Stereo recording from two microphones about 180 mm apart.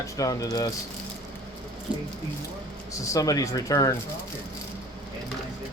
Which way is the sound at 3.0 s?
20° left (ahead or behind).